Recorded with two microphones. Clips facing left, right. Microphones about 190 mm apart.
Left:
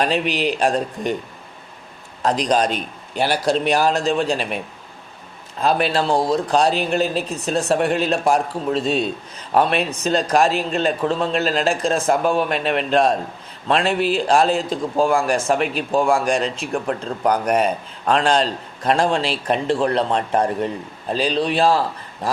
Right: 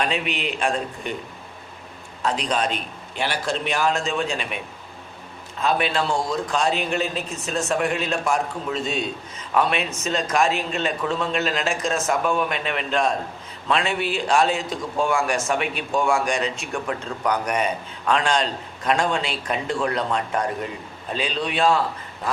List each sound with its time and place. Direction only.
0.0 s a man's voice: 35° left (ahead or behind)
2.2 s a man's voice: 40° left (ahead or behind)